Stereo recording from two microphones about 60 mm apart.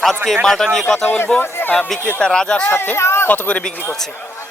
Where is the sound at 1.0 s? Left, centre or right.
Left.